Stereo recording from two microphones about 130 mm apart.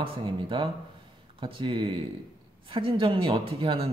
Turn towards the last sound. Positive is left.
turn(degrees=-45)  # may be behind; listen again after turning